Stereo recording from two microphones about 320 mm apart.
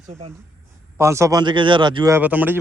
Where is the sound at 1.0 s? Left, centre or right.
Centre.